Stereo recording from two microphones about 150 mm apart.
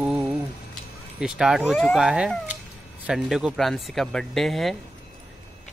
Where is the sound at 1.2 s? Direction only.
5° right (ahead or behind).